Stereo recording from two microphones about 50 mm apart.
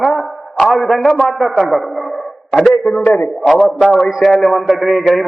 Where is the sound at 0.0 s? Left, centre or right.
Centre.